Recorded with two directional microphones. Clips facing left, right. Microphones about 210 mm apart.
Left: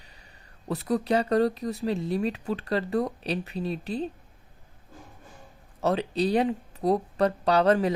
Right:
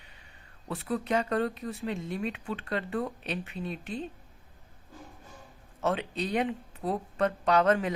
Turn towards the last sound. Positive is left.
turn(degrees=35)  # may be behind; listen again after turning